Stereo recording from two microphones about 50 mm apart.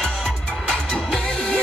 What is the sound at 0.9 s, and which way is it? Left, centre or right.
Music, centre.